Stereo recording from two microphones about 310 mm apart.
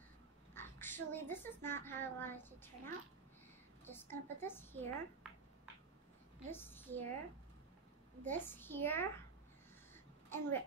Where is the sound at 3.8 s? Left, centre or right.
Centre.